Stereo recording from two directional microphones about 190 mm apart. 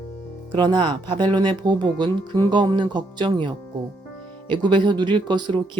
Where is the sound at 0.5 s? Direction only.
25° right (ahead or behind).